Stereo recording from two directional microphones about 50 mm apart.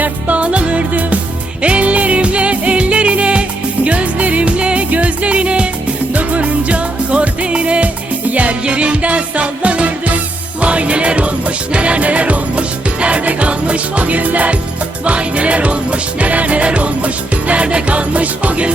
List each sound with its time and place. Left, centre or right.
0.0 s music: right